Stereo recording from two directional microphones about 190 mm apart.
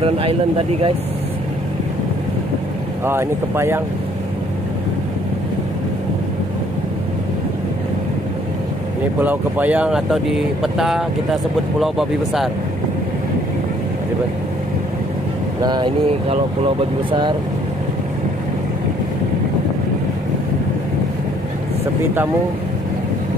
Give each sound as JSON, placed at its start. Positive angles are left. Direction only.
{"t": 0.0, "sound": "speech", "side_deg": -30}
{"t": 3.1, "sound": "speech", "side_deg": -15}
{"t": 9.2, "sound": "speech", "side_deg": -10}
{"t": 15.6, "sound": "speech", "side_deg": -25}